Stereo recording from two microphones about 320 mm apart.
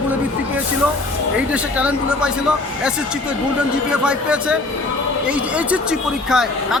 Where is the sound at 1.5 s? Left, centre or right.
Centre.